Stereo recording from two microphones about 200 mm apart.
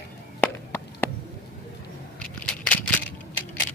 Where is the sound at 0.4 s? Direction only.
10° left (ahead or behind).